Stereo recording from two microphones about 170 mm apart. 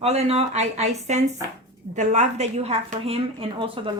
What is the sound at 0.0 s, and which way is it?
A woman's voice, 35° right (ahead or behind).